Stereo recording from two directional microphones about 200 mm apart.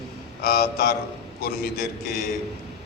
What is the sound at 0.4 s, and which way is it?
A man's voice, 50° left (ahead or behind).